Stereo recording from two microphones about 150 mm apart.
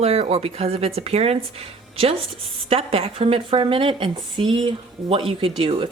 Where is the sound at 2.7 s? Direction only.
40° right (ahead or behind).